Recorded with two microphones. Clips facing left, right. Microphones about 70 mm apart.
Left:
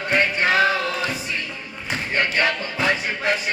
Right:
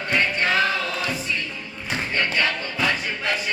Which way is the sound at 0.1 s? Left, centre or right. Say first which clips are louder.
Left 2 dB; centre.